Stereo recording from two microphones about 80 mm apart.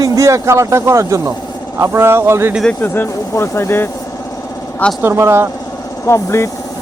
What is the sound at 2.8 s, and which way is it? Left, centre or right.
Speech, left.